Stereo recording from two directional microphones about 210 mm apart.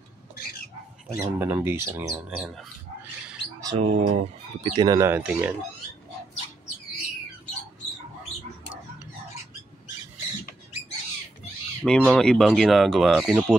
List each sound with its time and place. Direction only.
1.1 s speech: 15° right (ahead or behind)
3.6 s speech: 25° right (ahead or behind)
4.6 s speech: 20° right (ahead or behind)
11.8 s speech: 5° left (ahead or behind)